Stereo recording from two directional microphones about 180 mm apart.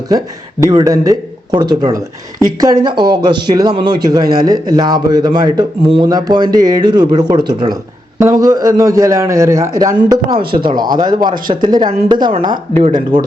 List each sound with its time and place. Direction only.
0.1 s a man's voice: 20° right (ahead or behind)